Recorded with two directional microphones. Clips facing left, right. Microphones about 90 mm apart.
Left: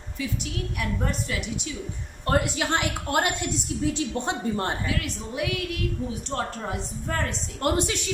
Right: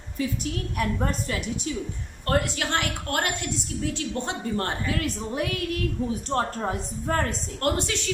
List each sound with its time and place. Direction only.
0.2 s a woman's voice: 40° right (ahead or behind)
2.2 s a woman's voice: 20° left (ahead or behind)
4.9 s a woman's voice: 40° right (ahead or behind)
7.6 s a woman's voice: 15° left (ahead or behind)